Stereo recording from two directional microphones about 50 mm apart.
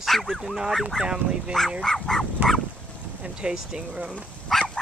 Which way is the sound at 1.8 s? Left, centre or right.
Centre.